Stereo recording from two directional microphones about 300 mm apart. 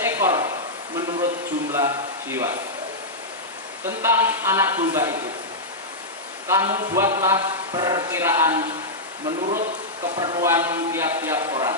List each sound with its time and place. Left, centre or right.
0.0 s a sound: centre
1.7 s speech: centre
3.8 s speech: centre
6.4 s a man's voice: centre
9.4 s speech: right
10.2 s speech: centre